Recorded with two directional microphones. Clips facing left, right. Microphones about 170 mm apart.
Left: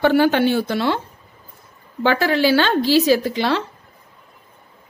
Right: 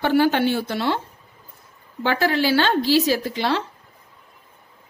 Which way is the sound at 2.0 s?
90° left.